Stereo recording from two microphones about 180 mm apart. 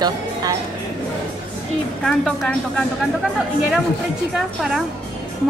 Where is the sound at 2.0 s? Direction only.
5° left (ahead or behind).